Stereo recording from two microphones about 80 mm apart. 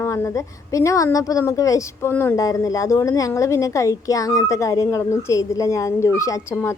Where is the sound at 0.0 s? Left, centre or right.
Left.